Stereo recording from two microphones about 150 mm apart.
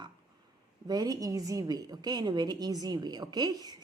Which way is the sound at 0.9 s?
25° right (ahead or behind).